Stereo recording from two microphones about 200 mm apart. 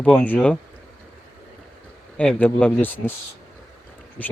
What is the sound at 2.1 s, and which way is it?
Speech, 5° left (ahead or behind).